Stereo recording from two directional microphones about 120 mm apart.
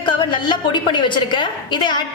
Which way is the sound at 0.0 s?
40° left (ahead or behind).